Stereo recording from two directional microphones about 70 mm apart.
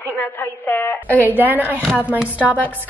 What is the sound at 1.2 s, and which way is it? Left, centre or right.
Speech, right.